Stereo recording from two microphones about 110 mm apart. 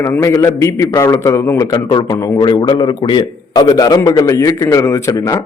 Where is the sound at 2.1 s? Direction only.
30° left (ahead or behind).